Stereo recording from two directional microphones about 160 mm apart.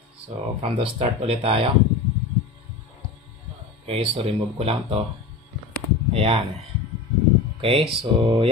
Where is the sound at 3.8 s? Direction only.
35° right (ahead or behind).